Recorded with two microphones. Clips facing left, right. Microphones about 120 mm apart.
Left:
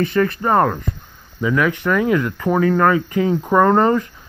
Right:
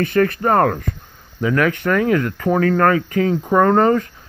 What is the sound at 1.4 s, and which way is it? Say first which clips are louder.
Speech: right 1 dB; 5° left (ahead or behind).